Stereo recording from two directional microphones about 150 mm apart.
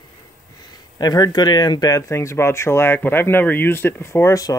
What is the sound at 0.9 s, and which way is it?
Speech, 25° left (ahead or behind).